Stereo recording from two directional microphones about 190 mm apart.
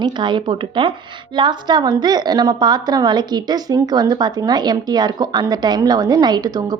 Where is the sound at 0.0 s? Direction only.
25° right (ahead or behind).